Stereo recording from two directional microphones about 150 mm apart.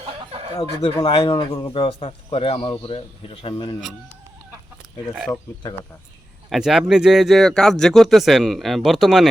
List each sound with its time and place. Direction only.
0.3 s a sound: 40° right (ahead or behind)
0.5 s speech: 30° left (ahead or behind)
6.5 s speech: centre (ahead or behind)